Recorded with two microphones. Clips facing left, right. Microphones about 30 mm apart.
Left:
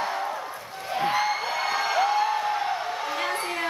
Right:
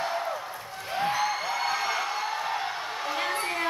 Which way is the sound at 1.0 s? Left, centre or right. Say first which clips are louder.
Left 2 dB; centre.